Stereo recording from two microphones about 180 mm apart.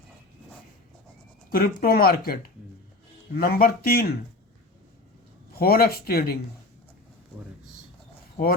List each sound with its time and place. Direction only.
1.5 s speech: 55° left (ahead or behind)
5.5 s speech: 60° left (ahead or behind)